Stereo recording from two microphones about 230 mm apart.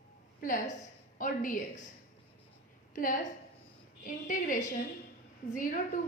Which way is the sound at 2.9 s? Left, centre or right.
Left.